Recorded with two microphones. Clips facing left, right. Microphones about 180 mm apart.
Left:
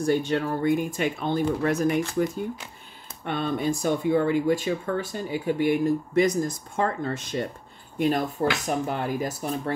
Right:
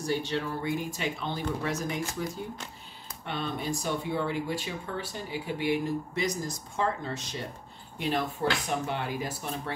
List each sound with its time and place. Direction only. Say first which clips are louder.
0.0 s speech: left 7 dB; 55° left (ahead or behind)
3.3 s speech: left 7 dB; 50° left (ahead or behind)